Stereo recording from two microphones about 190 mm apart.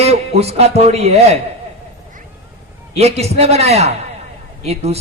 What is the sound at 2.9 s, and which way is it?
A man's voice, 35° right (ahead or behind).